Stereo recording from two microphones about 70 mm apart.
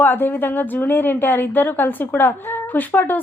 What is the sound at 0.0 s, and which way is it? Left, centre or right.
A woman's voice, left.